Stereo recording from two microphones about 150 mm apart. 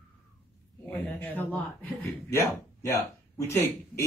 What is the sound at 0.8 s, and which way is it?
Speech, 10° left (ahead or behind).